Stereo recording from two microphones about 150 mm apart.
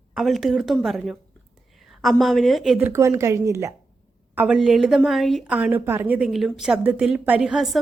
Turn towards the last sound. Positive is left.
turn(degrees=0)  # may be behind; listen again after turning